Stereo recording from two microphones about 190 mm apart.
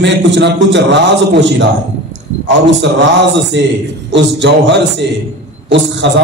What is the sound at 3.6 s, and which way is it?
A man's voice, 70° right (ahead or behind).